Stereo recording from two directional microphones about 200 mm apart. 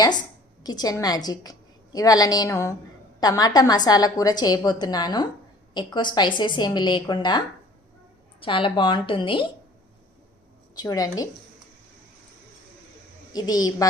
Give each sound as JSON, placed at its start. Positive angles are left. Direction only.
{"t": 0.6, "sound": "a woman's voice", "side_deg": 20}
{"t": 10.8, "sound": "a woman's voice", "side_deg": 20}
{"t": 13.3, "sound": "a woman's voice", "side_deg": 20}